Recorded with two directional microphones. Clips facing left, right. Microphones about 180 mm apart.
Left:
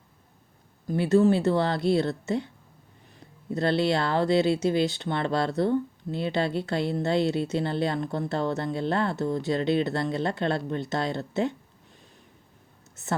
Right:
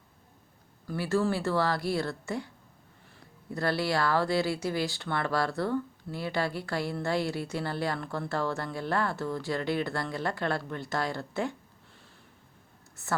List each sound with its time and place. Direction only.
0.9 s speech: 20° left (ahead or behind)
13.0 s speech: 20° left (ahead or behind)